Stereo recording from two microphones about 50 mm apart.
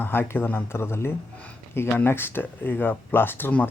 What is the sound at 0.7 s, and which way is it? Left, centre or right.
Speech, left.